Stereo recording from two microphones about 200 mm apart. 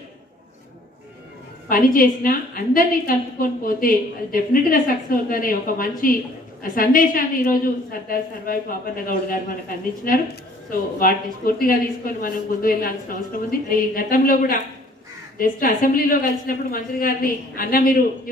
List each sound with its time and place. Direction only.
1.7 s a woman's voice: 45° left (ahead or behind)